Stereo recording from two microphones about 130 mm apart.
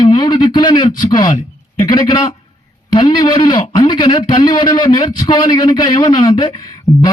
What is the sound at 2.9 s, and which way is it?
Speech, 35° left (ahead or behind).